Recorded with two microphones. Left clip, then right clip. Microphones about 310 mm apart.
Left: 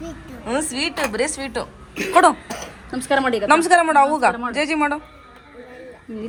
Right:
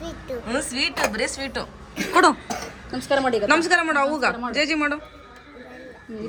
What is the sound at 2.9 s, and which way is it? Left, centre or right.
Speech, left.